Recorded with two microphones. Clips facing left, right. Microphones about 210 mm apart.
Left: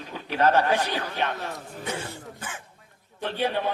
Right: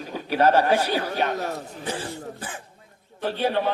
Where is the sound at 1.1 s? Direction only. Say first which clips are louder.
Right 4 dB; 40° right (ahead or behind).